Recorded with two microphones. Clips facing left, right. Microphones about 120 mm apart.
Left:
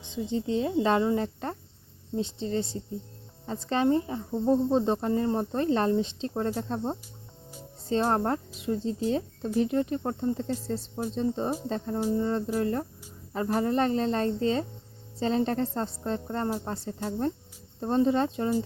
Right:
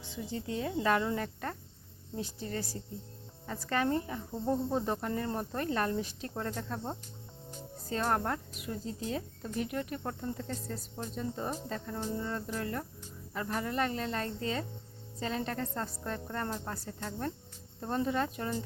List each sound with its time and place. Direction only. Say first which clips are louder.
0.0 s speech: left 8 dB; 20° left (ahead or behind)